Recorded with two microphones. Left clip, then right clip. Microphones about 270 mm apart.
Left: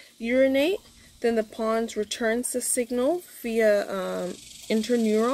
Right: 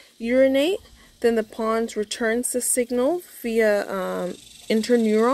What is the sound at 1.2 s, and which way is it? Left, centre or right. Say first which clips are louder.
A woman's voice: right 4 dB; right.